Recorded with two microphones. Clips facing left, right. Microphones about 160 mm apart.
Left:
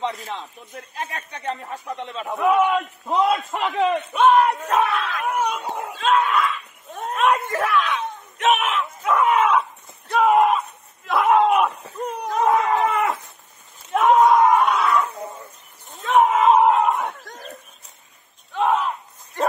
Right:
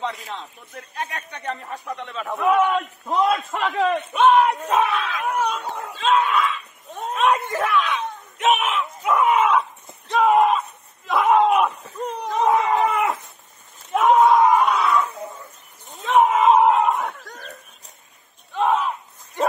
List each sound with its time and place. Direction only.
0.1 s a man's voice: centre (ahead or behind)
0.9 s speech: 30° left (ahead or behind)
2.4 s a man's voice: centre (ahead or behind)
3.3 s a man's voice: 20° left (ahead or behind)
4.2 s battle cry: centre (ahead or behind)
4.6 s screaming: 5° right (ahead or behind)
5.4 s dog: 15° left (ahead or behind)
5.9 s a sound: centre (ahead or behind)
16.1 s a sound: centre (ahead or behind)
18.6 s battle cry: centre (ahead or behind)